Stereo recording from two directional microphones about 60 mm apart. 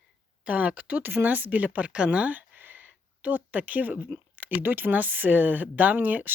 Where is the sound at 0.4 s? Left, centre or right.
Right.